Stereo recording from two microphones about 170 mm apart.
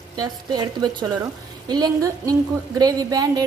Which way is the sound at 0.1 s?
25° right (ahead or behind).